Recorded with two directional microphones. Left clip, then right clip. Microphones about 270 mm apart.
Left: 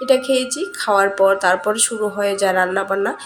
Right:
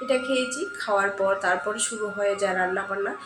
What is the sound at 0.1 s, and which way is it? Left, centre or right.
Speech, left.